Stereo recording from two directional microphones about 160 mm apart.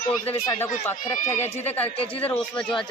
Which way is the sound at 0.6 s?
15° left (ahead or behind).